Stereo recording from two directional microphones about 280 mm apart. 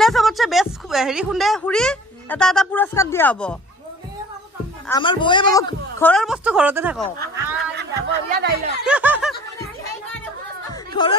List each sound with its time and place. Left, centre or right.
0.0 s a woman's voice: centre
4.8 s speech: centre
7.7 s speech: right
8.8 s snicker: centre
10.7 s a sound: centre